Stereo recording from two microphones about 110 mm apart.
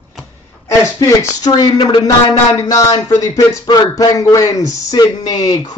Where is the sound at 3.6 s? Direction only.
40° left (ahead or behind).